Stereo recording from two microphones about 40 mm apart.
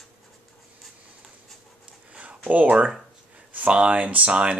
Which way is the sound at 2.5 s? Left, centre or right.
Right.